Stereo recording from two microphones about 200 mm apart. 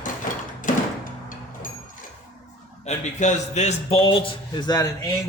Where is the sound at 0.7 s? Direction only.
40° left (ahead or behind).